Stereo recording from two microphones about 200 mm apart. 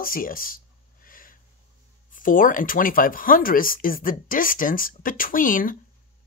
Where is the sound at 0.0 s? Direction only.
45° left (ahead or behind).